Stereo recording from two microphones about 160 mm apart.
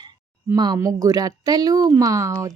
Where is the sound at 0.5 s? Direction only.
25° right (ahead or behind).